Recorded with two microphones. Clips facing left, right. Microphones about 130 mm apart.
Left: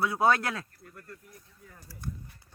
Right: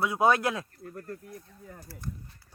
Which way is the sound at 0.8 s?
40° right (ahead or behind).